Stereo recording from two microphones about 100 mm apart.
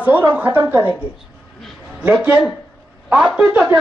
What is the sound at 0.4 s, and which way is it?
Speech, 20° right (ahead or behind).